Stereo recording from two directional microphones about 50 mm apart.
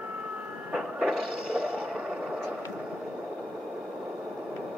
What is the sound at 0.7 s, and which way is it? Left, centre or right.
Printer, centre.